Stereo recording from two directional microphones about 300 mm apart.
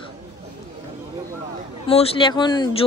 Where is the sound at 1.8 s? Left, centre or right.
Centre.